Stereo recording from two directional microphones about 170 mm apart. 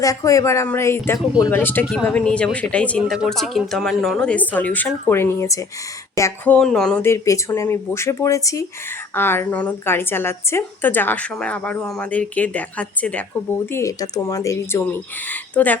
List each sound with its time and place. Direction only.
0.0 s a woman's voice: 20° left (ahead or behind)